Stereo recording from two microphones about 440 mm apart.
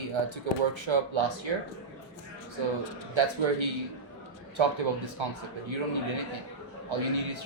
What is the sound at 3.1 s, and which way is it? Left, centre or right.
Speech, right.